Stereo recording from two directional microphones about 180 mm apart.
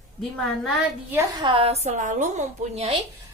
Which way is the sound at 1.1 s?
25° right (ahead or behind).